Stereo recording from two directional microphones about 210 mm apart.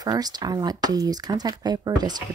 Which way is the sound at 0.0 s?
20° right (ahead or behind).